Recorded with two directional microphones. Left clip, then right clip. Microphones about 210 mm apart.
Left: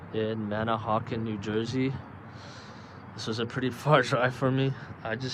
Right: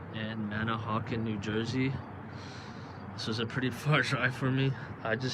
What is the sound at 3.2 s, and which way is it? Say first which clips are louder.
Speech: left 3 dB; 10° left (ahead or behind).